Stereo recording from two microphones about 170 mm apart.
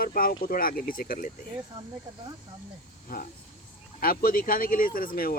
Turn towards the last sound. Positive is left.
turn(degrees=60)  # may be behind; listen again after turning